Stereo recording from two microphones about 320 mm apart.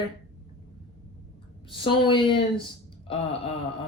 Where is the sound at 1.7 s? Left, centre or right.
Centre.